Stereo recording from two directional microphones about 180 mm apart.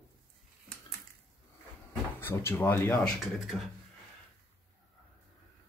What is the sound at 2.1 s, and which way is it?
Speech, 15° left (ahead or behind).